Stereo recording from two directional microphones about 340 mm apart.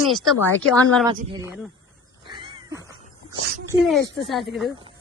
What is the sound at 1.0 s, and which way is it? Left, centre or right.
Speech, centre.